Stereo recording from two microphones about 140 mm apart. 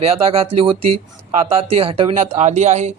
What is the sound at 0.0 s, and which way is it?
Speech, 45° right (ahead or behind).